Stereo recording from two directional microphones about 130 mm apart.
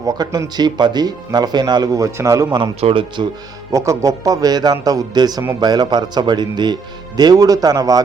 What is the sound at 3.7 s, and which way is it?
A man's voice, 25° right (ahead or behind).